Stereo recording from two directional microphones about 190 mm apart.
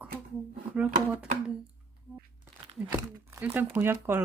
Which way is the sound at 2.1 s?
10° right (ahead or behind).